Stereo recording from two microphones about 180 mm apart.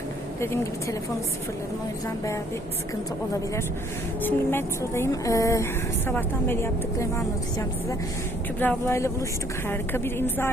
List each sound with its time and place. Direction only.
0.3 s speech: 15° left (ahead or behind)
4.2 s speech: 10° left (ahead or behind)
8.5 s speech: 10° left (ahead or behind)